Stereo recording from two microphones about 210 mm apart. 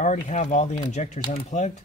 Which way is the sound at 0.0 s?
35° left (ahead or behind).